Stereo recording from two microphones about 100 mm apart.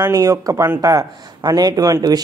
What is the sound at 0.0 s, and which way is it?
Speech, 35° right (ahead or behind).